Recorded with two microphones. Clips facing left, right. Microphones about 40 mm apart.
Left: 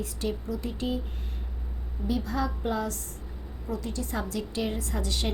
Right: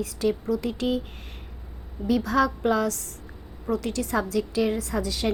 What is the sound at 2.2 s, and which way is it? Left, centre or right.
Speech, right.